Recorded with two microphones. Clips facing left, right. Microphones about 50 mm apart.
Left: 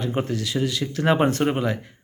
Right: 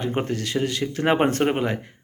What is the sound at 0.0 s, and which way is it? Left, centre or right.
Speech, right.